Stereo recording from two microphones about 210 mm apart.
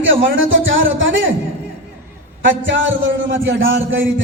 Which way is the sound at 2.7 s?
65° right (ahead or behind).